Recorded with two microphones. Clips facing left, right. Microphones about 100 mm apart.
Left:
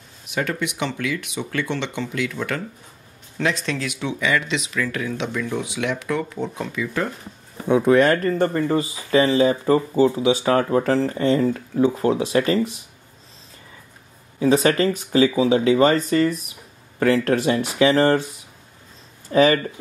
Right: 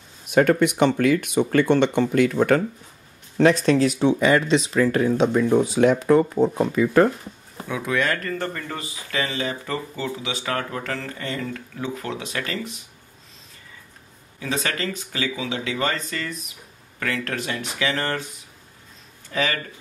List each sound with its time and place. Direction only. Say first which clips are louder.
0.3 s speech: right 8 dB; 45° right (ahead or behind)
7.6 s speech: left 9 dB; 35° left (ahead or behind)
14.4 s speech: left 10 dB; 30° left (ahead or behind)
19.2 s speech: left 9 dB; 35° left (ahead or behind)